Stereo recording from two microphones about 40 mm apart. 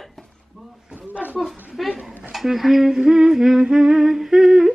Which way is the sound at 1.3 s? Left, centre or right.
Centre.